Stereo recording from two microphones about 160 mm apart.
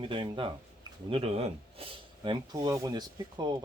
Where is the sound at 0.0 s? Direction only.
30° right (ahead or behind).